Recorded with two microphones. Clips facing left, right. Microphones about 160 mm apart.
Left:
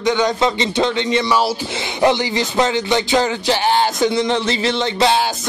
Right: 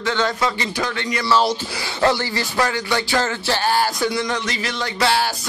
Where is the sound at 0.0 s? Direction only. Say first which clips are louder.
Left 5 dB; 15° left (ahead or behind).